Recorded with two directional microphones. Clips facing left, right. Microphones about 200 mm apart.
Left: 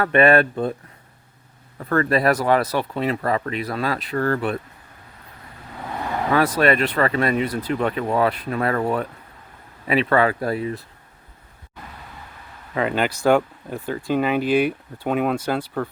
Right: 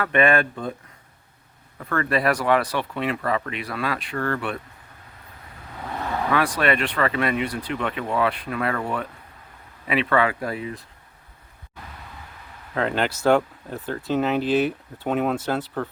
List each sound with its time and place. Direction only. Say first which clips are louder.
0.0 s speech: left 4 dB; 40° left (ahead or behind)
1.9 s speech: left 4 dB; 40° left (ahead or behind)
6.6 s speech: left 4 dB; 40° left (ahead or behind)
12.7 s speech: left 2 dB; 5° left (ahead or behind)